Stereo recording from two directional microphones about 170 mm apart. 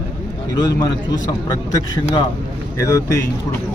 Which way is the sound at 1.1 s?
20° left (ahead or behind).